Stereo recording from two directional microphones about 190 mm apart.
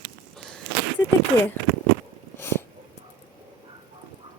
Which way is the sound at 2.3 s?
10° left (ahead or behind).